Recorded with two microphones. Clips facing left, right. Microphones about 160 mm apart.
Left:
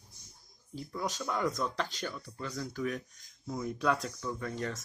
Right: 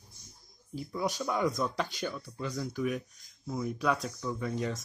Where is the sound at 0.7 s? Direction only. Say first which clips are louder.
Right 4 dB; 10° right (ahead or behind).